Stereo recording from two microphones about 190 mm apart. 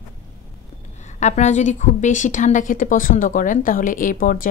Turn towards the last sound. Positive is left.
turn(degrees=45)  # may be behind; listen again after turning